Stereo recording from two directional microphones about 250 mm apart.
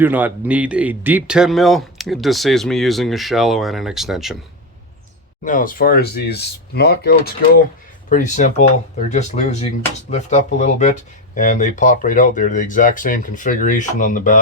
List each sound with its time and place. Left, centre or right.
0.0 s speech: centre
5.5 s speech: left